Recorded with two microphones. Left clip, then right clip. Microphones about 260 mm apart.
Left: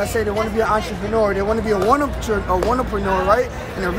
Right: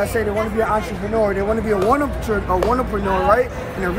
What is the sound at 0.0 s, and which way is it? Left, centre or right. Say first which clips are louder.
Speech: even; centre.